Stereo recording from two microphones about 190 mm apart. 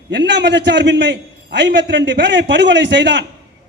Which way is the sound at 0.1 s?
70° right (ahead or behind).